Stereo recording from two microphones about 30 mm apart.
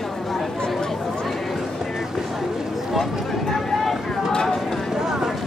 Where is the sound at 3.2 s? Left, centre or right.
Centre.